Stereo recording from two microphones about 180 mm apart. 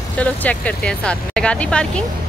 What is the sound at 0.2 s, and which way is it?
Speech, 10° left (ahead or behind).